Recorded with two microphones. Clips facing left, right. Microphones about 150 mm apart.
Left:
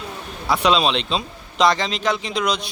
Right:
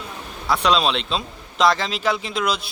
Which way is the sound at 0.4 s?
Centre (ahead or behind).